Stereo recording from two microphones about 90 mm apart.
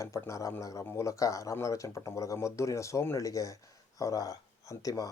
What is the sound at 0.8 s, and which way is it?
Speech, 25° left (ahead or behind).